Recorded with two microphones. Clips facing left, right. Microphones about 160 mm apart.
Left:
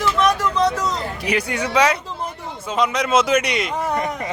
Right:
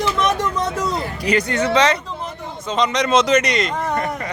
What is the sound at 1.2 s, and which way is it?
A man's voice, 10° left (ahead or behind).